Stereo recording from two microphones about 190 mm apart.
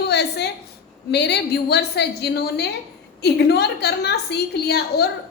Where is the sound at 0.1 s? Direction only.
60° left (ahead or behind).